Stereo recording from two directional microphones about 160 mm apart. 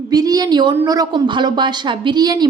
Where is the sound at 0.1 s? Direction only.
25° right (ahead or behind).